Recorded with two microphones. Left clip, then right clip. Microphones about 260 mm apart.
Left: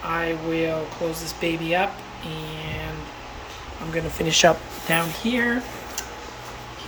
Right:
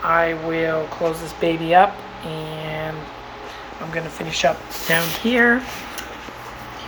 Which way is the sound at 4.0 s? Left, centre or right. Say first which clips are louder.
Even; centre.